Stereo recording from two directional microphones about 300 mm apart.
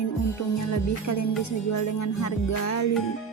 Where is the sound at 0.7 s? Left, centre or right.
Left.